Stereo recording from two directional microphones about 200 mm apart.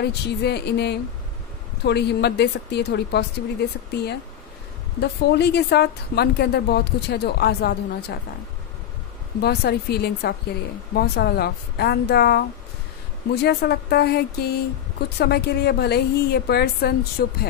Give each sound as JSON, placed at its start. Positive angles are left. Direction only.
{"t": 0.0, "sound": "a woman's voice", "side_deg": 55}
{"t": 9.4, "sound": "a woman's voice", "side_deg": 55}